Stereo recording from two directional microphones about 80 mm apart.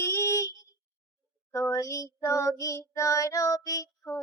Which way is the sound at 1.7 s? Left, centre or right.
Left.